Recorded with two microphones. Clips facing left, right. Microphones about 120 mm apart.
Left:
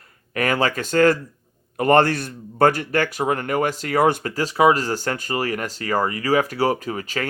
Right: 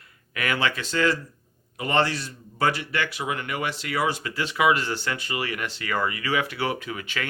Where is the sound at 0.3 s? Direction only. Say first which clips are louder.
Left 5 dB; 40° left (ahead or behind).